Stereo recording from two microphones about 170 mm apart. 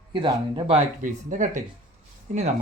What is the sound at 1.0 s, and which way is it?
Speech, 50° right (ahead or behind).